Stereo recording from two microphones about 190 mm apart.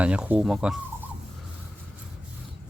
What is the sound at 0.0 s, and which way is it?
Speech, 5° right (ahead or behind).